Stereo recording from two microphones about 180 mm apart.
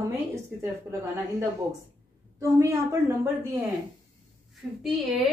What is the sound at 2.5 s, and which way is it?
Speech, 15° right (ahead or behind).